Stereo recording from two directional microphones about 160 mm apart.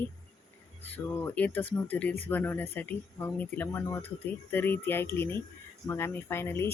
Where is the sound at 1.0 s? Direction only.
10° left (ahead or behind).